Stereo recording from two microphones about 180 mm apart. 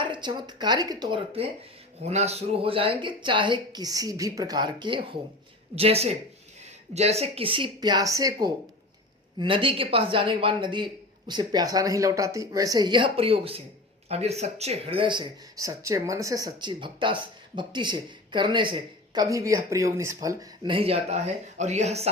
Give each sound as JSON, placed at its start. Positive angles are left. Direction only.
{"t": 0.0, "sound": "speech", "side_deg": -25}
{"t": 20.7, "sound": "speech", "side_deg": -30}